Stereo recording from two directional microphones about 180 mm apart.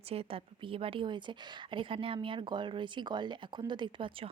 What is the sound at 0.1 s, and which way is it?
A woman's voice, 30° right (ahead or behind).